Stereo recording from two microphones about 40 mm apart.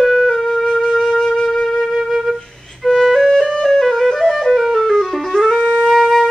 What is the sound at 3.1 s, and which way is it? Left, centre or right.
Music, centre.